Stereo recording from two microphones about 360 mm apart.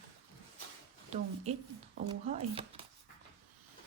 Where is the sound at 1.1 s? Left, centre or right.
Centre.